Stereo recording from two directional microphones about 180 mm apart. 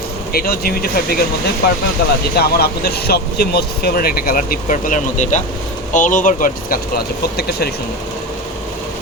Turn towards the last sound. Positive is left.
turn(degrees=60)  # may be behind; listen again after turning